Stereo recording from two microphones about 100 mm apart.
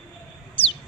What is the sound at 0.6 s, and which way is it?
Bird, 60° left (ahead or behind).